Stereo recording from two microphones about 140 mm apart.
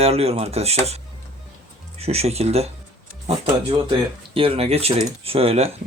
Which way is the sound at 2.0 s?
45° right (ahead or behind).